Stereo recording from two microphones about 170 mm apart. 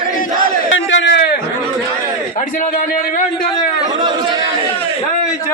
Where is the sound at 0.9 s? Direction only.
85° left.